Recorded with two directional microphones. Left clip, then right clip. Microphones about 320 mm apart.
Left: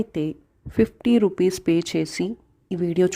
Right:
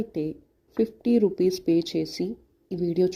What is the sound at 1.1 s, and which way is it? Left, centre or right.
Speech, centre.